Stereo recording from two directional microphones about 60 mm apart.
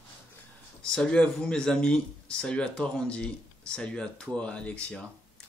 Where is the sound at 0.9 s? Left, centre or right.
Centre.